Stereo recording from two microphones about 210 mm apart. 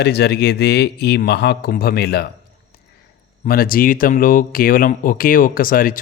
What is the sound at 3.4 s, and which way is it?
Speech, 45° left (ahead or behind).